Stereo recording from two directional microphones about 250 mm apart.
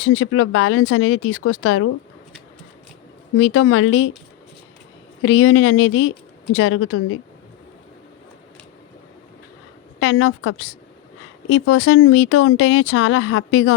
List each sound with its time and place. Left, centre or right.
0.0 s speech: left
3.3 s speech: left
5.2 s speech: left
10.0 s speech: left